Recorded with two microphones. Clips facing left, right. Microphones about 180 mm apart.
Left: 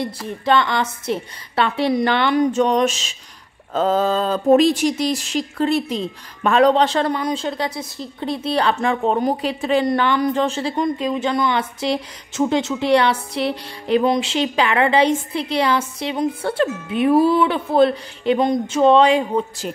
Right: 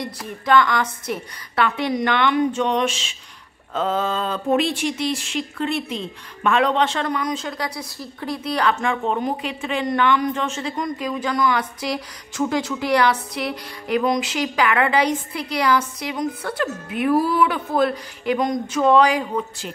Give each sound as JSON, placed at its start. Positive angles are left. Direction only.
{"t": 0.5, "sound": "a woman's voice", "side_deg": 25}